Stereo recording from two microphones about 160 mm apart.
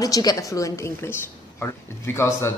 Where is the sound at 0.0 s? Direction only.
25° left (ahead or behind).